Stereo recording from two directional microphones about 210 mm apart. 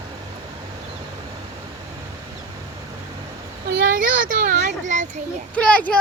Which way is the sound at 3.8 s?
40° right (ahead or behind).